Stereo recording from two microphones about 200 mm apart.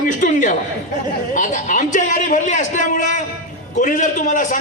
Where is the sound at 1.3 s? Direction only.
40° left (ahead or behind).